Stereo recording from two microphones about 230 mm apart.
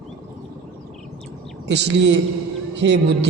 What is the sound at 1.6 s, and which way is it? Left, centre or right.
A man's voice, right.